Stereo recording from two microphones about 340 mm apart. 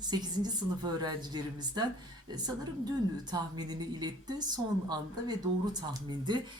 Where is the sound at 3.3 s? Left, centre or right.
Centre.